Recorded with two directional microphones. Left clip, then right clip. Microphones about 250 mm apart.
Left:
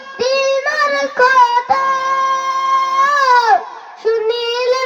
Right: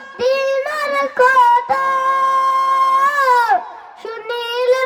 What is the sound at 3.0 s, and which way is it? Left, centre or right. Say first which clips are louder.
Baby cry: left 2 dB; right.